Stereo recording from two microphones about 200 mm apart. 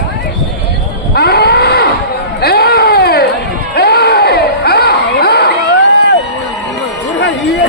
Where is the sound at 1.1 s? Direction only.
50° left (ahead or behind).